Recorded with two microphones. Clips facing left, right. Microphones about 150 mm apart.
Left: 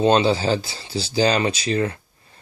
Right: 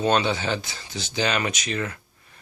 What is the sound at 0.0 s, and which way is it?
Speech, 30° left (ahead or behind).